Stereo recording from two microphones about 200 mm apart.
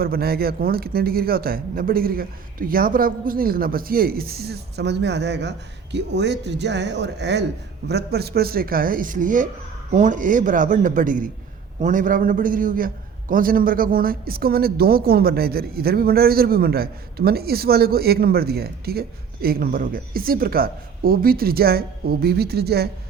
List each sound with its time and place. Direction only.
0.0 s a man's voice: 50° right (ahead or behind)